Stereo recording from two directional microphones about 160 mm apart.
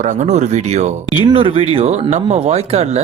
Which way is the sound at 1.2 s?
35° right (ahead or behind).